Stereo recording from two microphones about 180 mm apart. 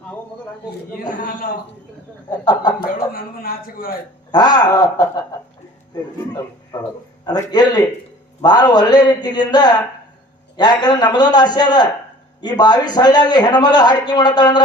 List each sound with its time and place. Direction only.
1.1 s a man's voice: 45° left (ahead or behind)
2.4 s a man's voice: 20° left (ahead or behind)
2.8 s a man's voice: 55° left (ahead or behind)
4.3 s a man's voice: 25° left (ahead or behind)
6.7 s a man's voice: 20° left (ahead or behind)